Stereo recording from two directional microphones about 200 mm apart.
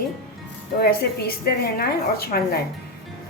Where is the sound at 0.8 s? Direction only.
50° left (ahead or behind).